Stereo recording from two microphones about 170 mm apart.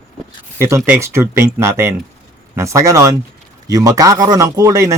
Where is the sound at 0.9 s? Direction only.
15° right (ahead or behind).